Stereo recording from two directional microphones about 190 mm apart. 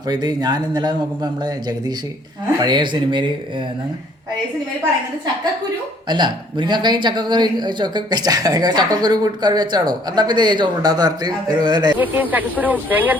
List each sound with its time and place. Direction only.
0.1 s speech: 20° right (ahead or behind)
6.1 s speech: 25° right (ahead or behind)
11.9 s speech: 10° right (ahead or behind)